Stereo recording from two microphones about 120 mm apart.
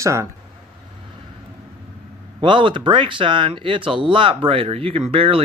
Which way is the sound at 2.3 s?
45° right (ahead or behind).